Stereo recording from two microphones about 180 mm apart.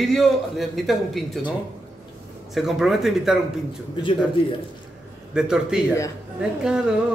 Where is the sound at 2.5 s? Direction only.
Centre (ahead or behind).